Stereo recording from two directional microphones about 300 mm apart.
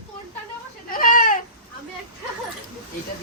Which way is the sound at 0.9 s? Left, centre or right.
Left.